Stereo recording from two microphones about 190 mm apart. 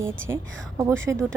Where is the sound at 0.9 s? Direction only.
90° right.